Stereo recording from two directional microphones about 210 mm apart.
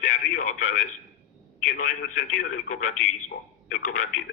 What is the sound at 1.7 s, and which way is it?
A man's voice, 40° left (ahead or behind).